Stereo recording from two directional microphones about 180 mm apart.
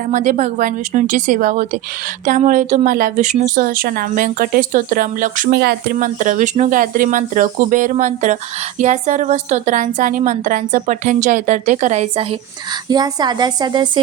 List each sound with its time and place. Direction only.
0.1 s speech: 45° right (ahead or behind); by 6.1 s 60° right (ahead or behind)
6.1 s speech: 45° right (ahead or behind)
12.9 s speech: 20° right (ahead or behind)